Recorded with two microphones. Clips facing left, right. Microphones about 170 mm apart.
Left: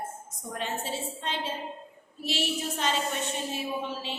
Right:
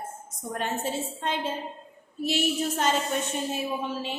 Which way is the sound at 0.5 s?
50° right (ahead or behind).